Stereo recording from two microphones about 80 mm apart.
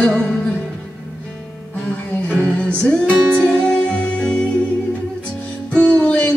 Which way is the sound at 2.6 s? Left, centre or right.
Centre.